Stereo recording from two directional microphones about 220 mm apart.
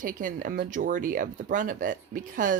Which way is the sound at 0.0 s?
35° right (ahead or behind).